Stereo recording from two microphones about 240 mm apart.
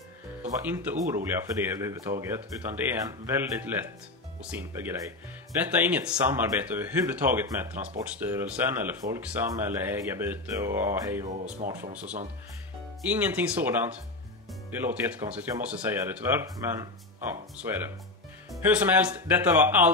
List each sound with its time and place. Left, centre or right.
0.4 s speech: centre
11.2 s speech: right
13.1 s speech: centre